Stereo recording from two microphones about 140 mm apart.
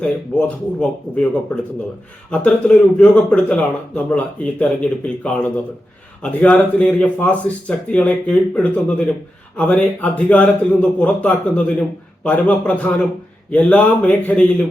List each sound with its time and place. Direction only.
0.0 s speech: 10° left (ahead or behind)